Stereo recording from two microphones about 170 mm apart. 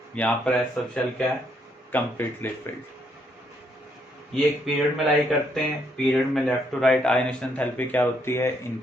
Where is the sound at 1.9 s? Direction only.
10° left (ahead or behind).